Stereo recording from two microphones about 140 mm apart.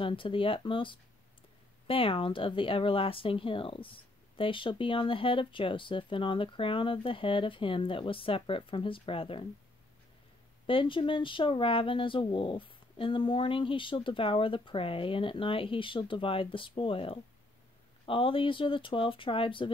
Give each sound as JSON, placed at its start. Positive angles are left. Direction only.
{"t": 0.0, "sound": "speech", "side_deg": 40}
{"t": 10.7, "sound": "speech", "side_deg": 40}